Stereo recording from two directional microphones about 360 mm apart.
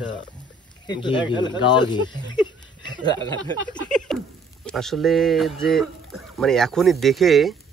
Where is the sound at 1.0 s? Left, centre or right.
Centre.